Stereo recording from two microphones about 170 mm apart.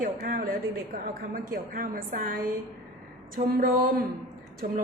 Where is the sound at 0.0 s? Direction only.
55° right (ahead or behind).